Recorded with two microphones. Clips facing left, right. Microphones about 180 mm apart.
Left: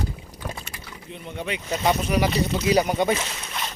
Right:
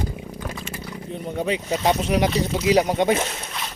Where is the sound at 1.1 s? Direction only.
40° right (ahead or behind); by 3.2 s 20° right (ahead or behind).